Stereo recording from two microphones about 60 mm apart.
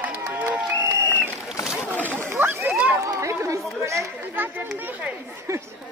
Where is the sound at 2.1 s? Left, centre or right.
Right.